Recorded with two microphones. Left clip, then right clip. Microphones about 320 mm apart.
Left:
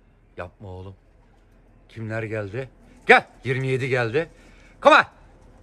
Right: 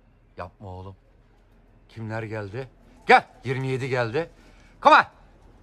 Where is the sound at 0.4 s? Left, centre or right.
Centre.